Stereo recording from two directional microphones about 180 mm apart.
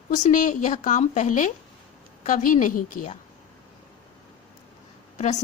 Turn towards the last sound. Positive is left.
turn(degrees=40)  # may be behind; listen again after turning